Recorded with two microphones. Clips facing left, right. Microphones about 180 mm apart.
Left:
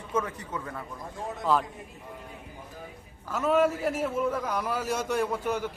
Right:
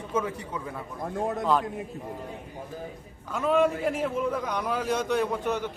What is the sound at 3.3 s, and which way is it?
A man's voice, 5° left (ahead or behind).